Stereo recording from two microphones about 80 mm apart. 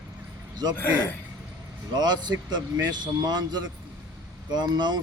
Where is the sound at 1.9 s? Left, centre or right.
Right.